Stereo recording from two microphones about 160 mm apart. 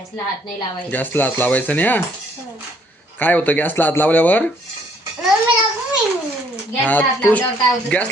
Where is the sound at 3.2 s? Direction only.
10° left (ahead or behind).